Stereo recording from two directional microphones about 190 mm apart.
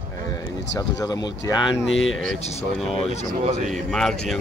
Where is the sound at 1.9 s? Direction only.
85° left.